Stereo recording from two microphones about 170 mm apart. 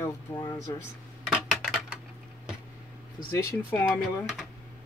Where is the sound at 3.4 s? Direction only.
15° left (ahead or behind).